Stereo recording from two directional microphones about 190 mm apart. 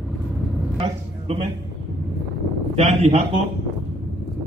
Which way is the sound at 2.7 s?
35° right (ahead or behind).